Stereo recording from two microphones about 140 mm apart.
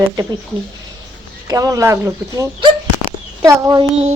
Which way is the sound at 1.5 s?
25° right (ahead or behind).